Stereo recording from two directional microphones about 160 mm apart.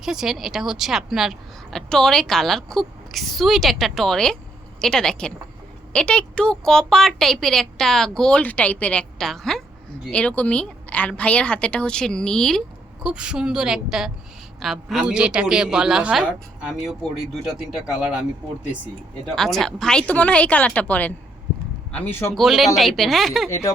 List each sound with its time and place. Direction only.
0.0 s a woman's voice: 5° right (ahead or behind)
19.4 s speech: centre (ahead or behind)
22.4 s a woman's voice: centre (ahead or behind)
23.5 s speech: 15° left (ahead or behind)